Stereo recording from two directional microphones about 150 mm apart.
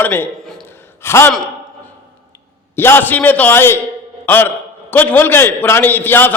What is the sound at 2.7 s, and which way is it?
A man's voice, 15° left (ahead or behind).